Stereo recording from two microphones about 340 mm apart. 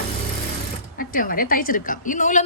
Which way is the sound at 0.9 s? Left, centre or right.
Left.